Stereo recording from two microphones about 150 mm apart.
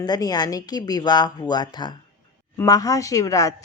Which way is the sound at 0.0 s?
25° left (ahead or behind).